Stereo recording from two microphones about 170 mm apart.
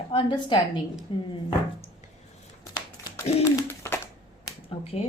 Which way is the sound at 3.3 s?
40° left (ahead or behind).